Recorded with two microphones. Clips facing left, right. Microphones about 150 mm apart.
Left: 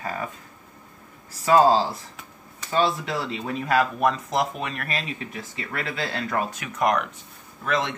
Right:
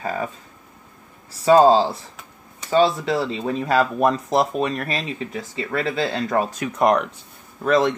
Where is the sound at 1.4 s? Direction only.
30° right (ahead or behind).